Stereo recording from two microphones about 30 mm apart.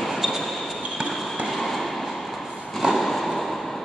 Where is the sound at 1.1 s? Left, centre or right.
Centre.